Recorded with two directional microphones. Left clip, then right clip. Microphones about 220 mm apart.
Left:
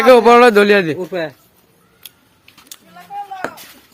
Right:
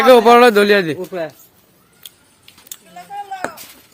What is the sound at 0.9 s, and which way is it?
Speech, 45° left (ahead or behind).